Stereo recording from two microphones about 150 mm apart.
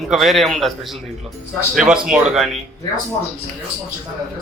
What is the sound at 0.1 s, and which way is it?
Speech, centre (ahead or behind).